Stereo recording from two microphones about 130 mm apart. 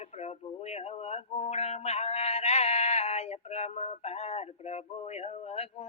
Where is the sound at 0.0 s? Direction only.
55° left (ahead or behind).